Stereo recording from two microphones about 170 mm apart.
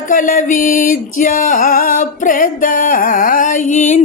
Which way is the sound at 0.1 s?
50° left (ahead or behind).